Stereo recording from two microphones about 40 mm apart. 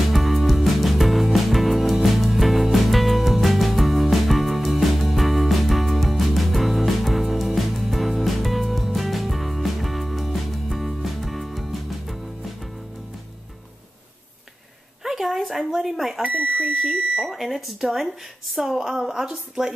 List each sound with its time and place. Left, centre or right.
0.1 s music: centre
15.0 s a sound: centre
15.8 s smoke detector: centre
16.3 s smoke detector: right
16.8 s speech: right
17.3 s a woman's voice: centre